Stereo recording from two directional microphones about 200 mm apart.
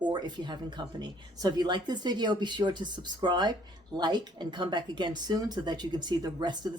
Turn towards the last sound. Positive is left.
turn(degrees=-20)  # may be behind; listen again after turning